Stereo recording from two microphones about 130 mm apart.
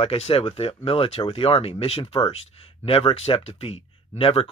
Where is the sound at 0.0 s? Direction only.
50° left (ahead or behind).